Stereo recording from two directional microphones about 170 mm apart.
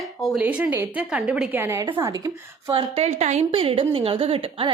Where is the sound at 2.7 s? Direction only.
35° right (ahead or behind).